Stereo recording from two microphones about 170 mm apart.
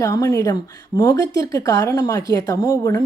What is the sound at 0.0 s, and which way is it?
A woman's voice, 20° left (ahead or behind).